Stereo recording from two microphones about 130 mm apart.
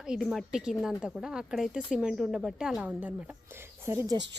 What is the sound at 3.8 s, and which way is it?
Speech, 25° right (ahead or behind).